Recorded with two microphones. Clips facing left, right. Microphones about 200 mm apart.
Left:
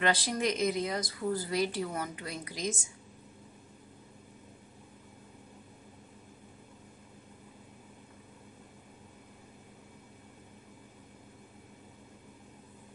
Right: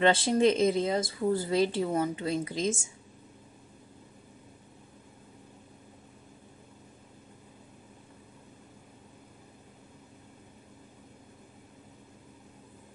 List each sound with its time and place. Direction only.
0.0 s a woman's voice: 25° right (ahead or behind)